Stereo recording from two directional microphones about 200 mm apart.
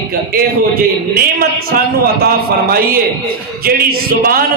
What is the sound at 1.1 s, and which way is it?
A man's voice, 50° right (ahead or behind).